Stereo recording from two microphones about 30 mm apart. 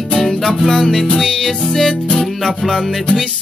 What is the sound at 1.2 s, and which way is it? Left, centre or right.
Music, centre.